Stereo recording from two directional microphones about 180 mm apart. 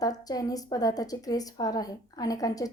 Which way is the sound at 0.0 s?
20° left (ahead or behind).